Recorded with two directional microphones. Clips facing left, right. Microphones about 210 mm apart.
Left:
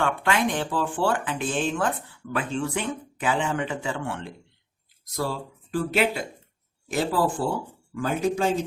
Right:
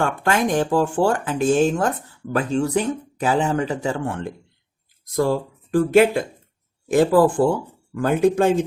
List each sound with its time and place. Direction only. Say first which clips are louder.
0.0 s speech: right 3 dB; 45° right (ahead or behind)